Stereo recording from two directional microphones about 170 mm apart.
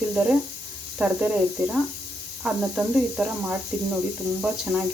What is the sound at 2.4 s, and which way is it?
A woman's voice, 5° right (ahead or behind).